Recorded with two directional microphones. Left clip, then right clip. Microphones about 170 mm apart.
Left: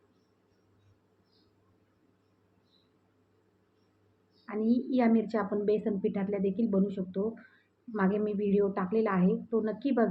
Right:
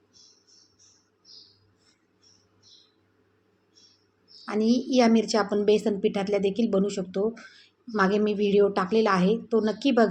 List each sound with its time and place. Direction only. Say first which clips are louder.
4.4 s speech: right 6 dB; 20° right (ahead or behind)